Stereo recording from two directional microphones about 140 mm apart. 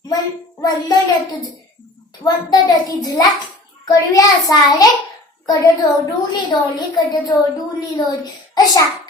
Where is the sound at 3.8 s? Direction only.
25° left (ahead or behind).